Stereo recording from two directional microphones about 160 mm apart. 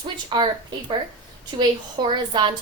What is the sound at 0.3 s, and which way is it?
Speech, 30° right (ahead or behind).